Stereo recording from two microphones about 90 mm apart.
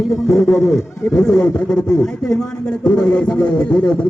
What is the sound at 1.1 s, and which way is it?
Speech, 30° left (ahead or behind).